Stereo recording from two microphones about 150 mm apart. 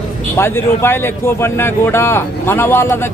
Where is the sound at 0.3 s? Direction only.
15° left (ahead or behind).